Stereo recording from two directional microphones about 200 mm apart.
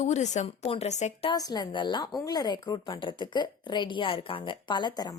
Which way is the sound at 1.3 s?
20° left (ahead or behind).